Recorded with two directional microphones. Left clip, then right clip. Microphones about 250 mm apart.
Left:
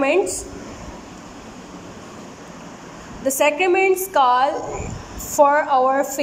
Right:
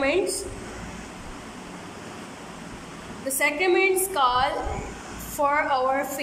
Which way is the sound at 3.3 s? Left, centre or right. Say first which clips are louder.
Left 5 dB; centre.